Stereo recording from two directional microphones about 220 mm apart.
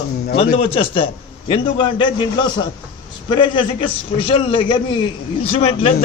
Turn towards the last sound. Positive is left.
turn(degrees=25)  # may be behind; listen again after turning